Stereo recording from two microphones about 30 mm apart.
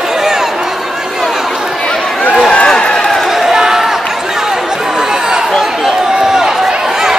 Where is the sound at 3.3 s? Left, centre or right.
Centre.